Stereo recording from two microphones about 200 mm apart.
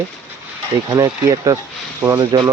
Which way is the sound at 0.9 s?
15° right (ahead or behind).